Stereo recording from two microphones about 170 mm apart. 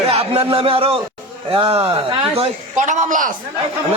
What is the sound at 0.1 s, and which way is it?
A man's voice, 35° right (ahead or behind).